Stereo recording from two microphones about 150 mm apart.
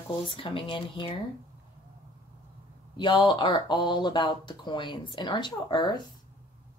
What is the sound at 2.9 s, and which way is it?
Speech, 30° left (ahead or behind).